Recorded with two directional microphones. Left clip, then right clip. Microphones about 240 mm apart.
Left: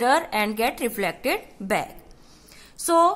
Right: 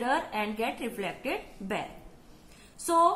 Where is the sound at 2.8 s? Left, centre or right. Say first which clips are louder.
Left 5 dB; left.